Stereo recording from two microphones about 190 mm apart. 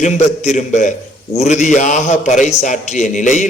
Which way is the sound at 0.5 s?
40° left (ahead or behind).